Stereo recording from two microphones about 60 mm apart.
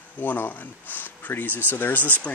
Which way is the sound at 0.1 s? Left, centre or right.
Left.